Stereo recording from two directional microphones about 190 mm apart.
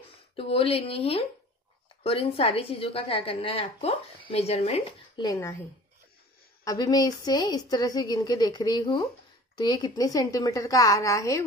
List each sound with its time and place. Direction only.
0.4 s a woman's voice: 30° left (ahead or behind)
5.2 s a woman's voice: 15° left (ahead or behind)
6.6 s a woman's voice: 20° left (ahead or behind)